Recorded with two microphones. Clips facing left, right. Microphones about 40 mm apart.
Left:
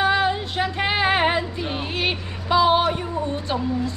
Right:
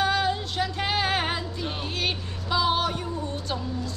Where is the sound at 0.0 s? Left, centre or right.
Left.